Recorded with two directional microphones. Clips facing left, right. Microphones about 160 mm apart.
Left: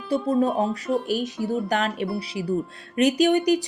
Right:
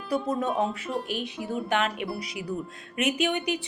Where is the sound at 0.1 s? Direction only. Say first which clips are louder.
Left 5 dB; 30° left (ahead or behind).